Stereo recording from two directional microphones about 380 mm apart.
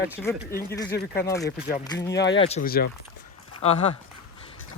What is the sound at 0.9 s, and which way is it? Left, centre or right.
Speech, left.